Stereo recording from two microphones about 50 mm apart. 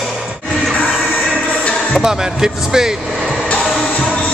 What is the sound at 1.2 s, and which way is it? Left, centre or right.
Music, left.